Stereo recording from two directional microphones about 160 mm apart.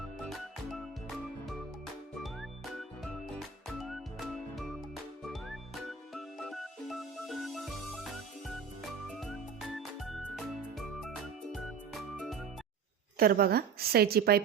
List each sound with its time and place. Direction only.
0.3 s music: centre (ahead or behind)
3.0 s music: centre (ahead or behind)
13.1 s a woman's voice: 70° right (ahead or behind)